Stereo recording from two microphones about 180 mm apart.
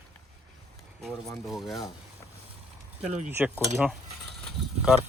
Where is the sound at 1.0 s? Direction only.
Centre (ahead or behind).